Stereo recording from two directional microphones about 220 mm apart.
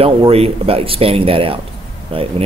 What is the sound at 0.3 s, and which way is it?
Speech, 25° right (ahead or behind).